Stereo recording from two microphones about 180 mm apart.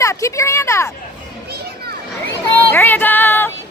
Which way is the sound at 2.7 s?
10° left (ahead or behind).